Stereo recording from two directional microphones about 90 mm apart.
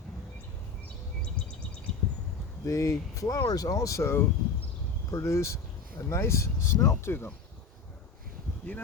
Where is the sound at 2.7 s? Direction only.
35° left (ahead or behind).